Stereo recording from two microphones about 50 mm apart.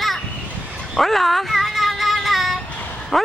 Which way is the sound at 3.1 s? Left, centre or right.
Centre.